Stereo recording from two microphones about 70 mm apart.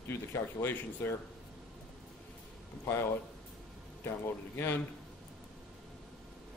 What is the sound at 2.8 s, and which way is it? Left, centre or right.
Speech, left.